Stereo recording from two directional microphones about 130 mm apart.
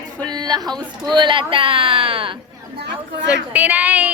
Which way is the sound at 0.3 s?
30° right (ahead or behind).